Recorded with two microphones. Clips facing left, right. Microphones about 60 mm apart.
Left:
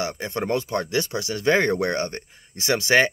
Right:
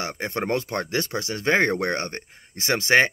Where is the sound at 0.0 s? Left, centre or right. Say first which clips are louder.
Left 1 dB; right.